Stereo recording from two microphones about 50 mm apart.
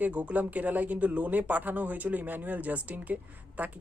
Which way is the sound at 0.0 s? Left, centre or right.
Right.